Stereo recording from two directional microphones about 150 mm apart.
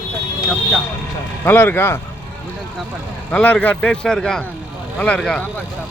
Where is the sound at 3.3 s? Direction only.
10° left (ahead or behind).